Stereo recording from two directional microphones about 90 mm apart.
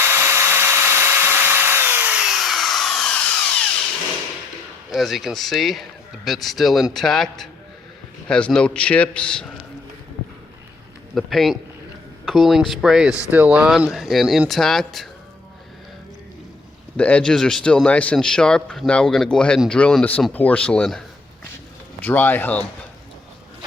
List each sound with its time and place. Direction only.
0.0 s tools: 30° right (ahead or behind)
2.1 s tools: 5° right (ahead or behind)
4.9 s a man's voice: centre (ahead or behind)
11.1 s speech: centre (ahead or behind)
17.0 s a man's voice: 15° left (ahead or behind)
22.0 s speech: 20° left (ahead or behind)